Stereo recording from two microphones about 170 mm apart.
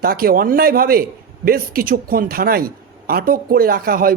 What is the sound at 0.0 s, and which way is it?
A man's voice, 60° right (ahead or behind).